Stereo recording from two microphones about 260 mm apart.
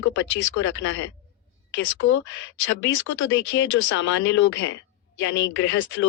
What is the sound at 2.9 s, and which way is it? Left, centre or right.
Speech, left.